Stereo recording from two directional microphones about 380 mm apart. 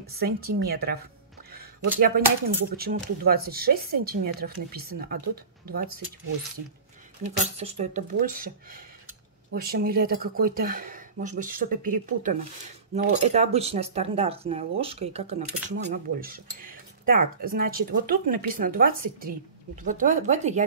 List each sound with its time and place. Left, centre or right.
0.0 s speech: right
7.5 s speech: centre